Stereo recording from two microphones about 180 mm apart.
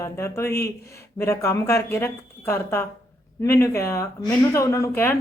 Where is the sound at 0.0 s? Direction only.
15° left (ahead or behind).